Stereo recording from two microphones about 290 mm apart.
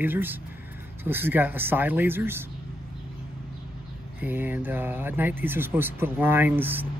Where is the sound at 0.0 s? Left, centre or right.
Centre.